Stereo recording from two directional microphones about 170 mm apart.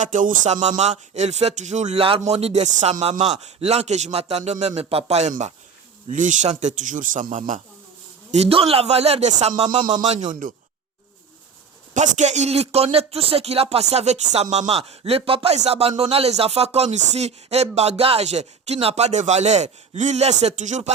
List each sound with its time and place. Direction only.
0.0 s a man's voice: 50° right (ahead or behind)
8.3 s speech: 35° right (ahead or behind)
9.5 s a sound: 25° right (ahead or behind)
10.1 s a man's voice: 45° right (ahead or behind)
11.9 s speech: 45° right (ahead or behind)